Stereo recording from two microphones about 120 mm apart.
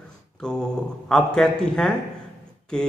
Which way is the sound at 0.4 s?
5° left (ahead or behind).